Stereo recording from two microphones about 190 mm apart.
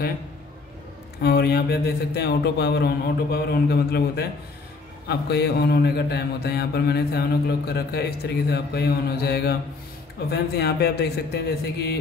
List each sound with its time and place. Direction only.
1.2 s mantra: 55° left (ahead or behind)